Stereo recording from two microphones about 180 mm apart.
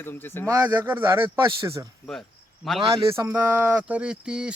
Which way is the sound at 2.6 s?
Centre (ahead or behind).